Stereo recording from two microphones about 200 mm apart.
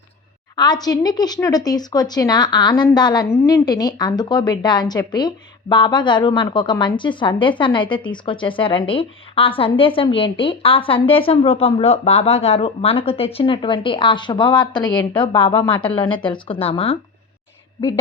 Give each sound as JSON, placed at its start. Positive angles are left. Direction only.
{"t": 0.5, "sound": "a woman's voice", "side_deg": 20}